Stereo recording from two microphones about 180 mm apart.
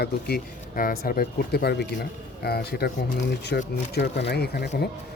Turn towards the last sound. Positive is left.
turn(degrees=65)  # may be behind; listen again after turning